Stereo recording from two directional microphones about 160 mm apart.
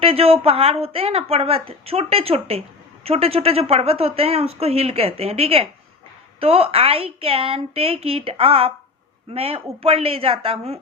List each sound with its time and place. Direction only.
0.0 s speech: 35° right (ahead or behind)